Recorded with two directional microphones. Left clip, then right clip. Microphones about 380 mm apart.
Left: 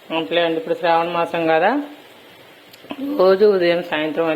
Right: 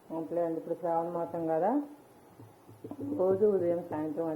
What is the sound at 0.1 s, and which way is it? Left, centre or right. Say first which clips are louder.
Speech: left 14 dB; left.